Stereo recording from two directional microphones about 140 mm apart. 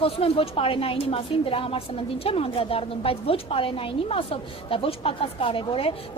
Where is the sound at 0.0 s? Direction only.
40° left (ahead or behind).